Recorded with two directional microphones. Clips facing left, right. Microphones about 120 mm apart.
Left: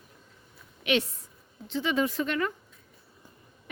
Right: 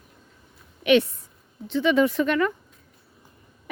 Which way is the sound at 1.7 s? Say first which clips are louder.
Right 7 dB; 70° right (ahead or behind).